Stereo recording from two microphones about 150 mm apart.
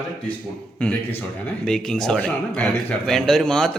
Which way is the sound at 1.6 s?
5° left (ahead or behind).